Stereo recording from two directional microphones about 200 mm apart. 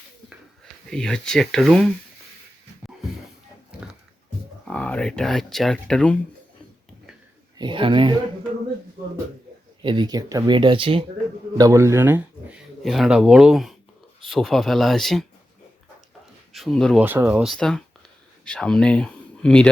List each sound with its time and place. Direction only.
0.3 s speech: centre (ahead or behind)
4.7 s speech: 5° left (ahead or behind)
7.6 s speech: 25° right (ahead or behind)
9.8 s speech: 25° right (ahead or behind); by 15.3 s centre (ahead or behind)
16.5 s speech: centre (ahead or behind)
17.0 s speech: 10° right (ahead or behind)